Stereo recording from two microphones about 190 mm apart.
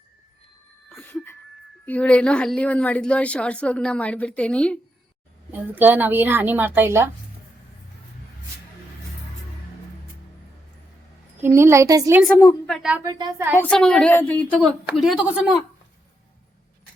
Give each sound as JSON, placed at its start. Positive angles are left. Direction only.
{"t": 0.9, "sound": "a sound", "side_deg": 10}
{"t": 1.8, "sound": "speech", "side_deg": 5}
{"t": 5.5, "sound": "a woman's voice", "side_deg": -10}
{"t": 11.4, "sound": "a woman's voice", "side_deg": -15}
{"t": 12.6, "sound": "speech", "side_deg": 0}
{"t": 13.0, "sound": "a woman's voice", "side_deg": -20}
{"t": 13.6, "sound": "a woman's voice", "side_deg": 5}